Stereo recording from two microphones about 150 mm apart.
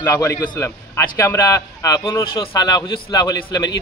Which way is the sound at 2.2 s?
35° left (ahead or behind).